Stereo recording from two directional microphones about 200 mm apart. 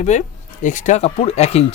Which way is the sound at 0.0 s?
35° left (ahead or behind).